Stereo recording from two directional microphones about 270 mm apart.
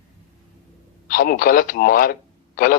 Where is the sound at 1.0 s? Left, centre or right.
Left.